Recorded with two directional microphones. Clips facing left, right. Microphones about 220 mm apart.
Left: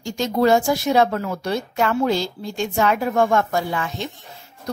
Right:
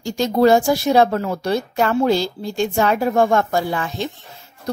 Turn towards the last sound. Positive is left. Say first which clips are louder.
# right 3 dB
turn(degrees=-35)  # may be behind; listen again after turning